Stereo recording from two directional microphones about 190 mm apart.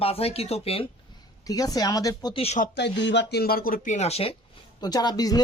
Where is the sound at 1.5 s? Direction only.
20° left (ahead or behind).